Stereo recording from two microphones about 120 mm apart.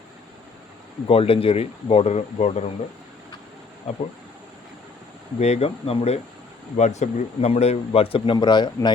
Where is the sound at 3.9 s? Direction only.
60° left (ahead or behind).